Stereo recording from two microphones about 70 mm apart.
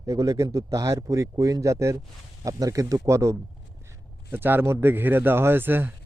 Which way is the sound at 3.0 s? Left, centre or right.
Right.